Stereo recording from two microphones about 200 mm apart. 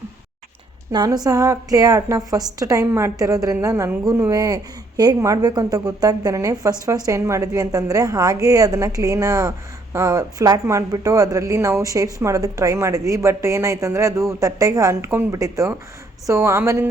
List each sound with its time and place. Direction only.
0.9 s a woman's voice: 20° right (ahead or behind)